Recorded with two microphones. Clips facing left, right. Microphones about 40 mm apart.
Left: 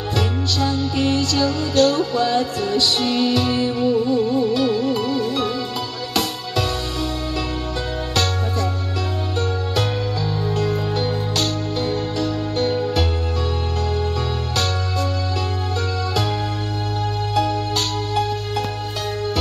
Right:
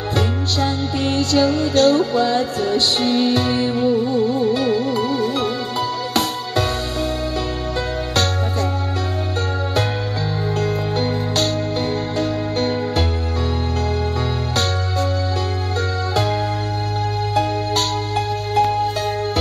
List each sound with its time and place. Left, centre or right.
0.1 s music: right
10.5 s music: right
11.0 s music: right
17.3 s music: right